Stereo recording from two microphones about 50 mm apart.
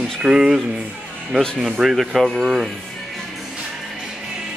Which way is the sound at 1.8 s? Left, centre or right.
Centre.